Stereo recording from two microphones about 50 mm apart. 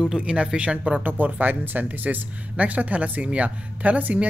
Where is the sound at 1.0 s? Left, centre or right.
Right.